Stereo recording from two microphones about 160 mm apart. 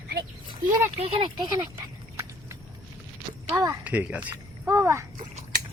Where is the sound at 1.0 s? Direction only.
30° right (ahead or behind).